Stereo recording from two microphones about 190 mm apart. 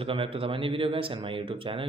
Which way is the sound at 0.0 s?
30° right (ahead or behind).